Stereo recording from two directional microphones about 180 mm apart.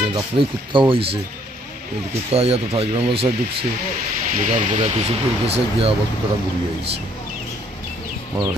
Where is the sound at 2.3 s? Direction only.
35° right (ahead or behind).